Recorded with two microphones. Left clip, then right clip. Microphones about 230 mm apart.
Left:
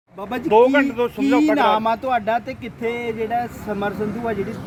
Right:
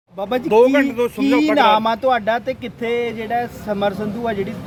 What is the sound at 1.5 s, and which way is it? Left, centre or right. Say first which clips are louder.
Speech: right 3 dB; right.